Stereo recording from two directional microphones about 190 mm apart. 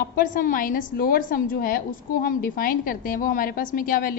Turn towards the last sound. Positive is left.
turn(degrees=45)  # may be behind; listen again after turning